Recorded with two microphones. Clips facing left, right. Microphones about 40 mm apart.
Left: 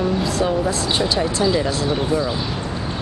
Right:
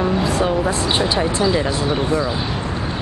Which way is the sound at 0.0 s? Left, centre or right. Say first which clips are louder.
Right 2 dB; right.